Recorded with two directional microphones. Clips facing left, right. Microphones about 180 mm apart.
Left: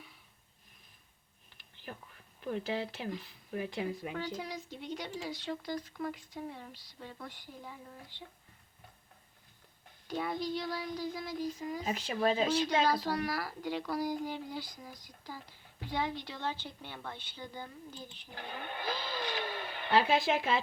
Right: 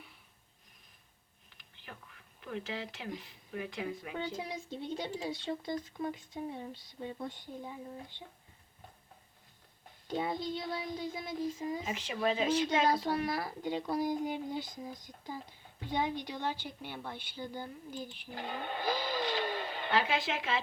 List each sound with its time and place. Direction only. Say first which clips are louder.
2.5 s speech: left 4 dB; 35° left (ahead or behind)
4.1 s a woman's voice: even; 25° right (ahead or behind)
10.1 s a woman's voice: even; 25° right (ahead or behind)
11.9 s speech: left 4 dB; 40° left (ahead or behind)
12.8 s a woman's voice: right 1 dB; 25° right (ahead or behind)
18.9 s vehicle: right 4 dB; 15° right (ahead or behind)
19.9 s speech: left 5 dB; 35° left (ahead or behind)